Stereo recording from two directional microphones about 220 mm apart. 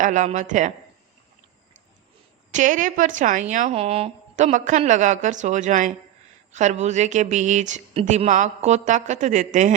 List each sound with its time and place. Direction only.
0.0 s speech: 35° right (ahead or behind)
2.5 s speech: 35° right (ahead or behind)